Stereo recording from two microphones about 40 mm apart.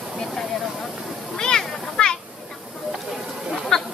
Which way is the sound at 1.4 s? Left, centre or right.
Centre.